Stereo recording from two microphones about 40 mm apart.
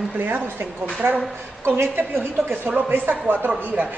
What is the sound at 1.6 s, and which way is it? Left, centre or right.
Speech, right.